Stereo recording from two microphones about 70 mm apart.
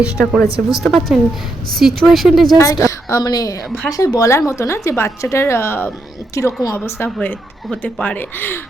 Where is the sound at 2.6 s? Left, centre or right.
Left.